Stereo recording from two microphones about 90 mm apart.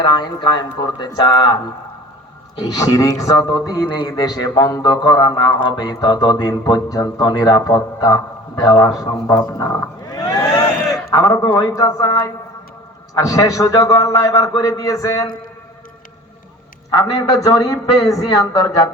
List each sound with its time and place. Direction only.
0.0 s speech: 55° left (ahead or behind)
2.6 s a man's voice: 45° left (ahead or behind)
10.9 s a sound: 45° left (ahead or behind)
11.4 s a man's voice: 50° left (ahead or behind)
17.0 s a man's voice: 40° left (ahead or behind)